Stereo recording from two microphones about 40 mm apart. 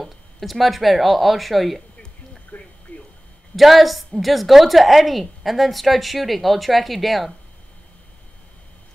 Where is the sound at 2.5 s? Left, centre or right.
Left.